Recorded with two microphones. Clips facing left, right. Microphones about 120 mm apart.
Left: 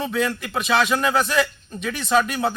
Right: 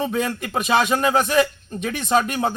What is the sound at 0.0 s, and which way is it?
A man's voice, 45° right (ahead or behind).